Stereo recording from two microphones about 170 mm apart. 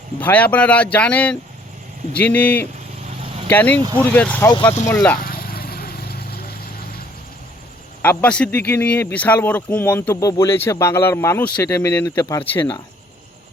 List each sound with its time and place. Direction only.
0.2 s a man's voice: 10° left (ahead or behind)
5.2 s vehicle: 60° left (ahead or behind)
8.0 s a man's voice: 10° left (ahead or behind)